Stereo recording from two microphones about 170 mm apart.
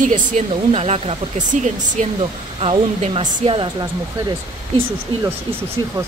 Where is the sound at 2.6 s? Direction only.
30° right (ahead or behind).